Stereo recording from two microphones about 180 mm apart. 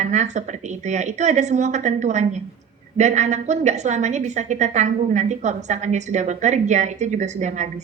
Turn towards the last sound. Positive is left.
turn(degrees=-40)  # may be behind; listen again after turning